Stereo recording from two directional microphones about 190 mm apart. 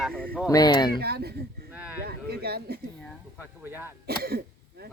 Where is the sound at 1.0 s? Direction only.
55° right (ahead or behind).